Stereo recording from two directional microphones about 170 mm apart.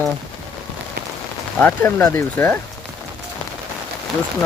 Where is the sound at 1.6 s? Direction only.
10° left (ahead or behind).